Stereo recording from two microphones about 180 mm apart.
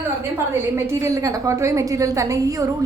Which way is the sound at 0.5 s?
15° right (ahead or behind).